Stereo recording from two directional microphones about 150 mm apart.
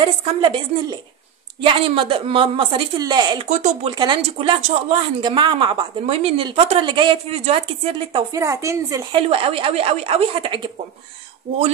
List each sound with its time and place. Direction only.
0.0 s a woman's voice: 35° right (ahead or behind)
3.4 s speech: 50° right (ahead or behind)
3.9 s a woman's voice: 30° right (ahead or behind)
5.2 s a woman's voice: 30° right (ahead or behind)
8.3 s a woman's voice: 20° right (ahead or behind)
9.1 s a woman's voice: 40° right (ahead or behind)